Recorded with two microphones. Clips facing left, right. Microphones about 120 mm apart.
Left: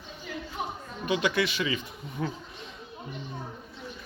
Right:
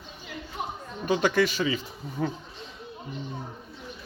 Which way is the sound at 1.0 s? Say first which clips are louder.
Right 3 dB; 40° right (ahead or behind).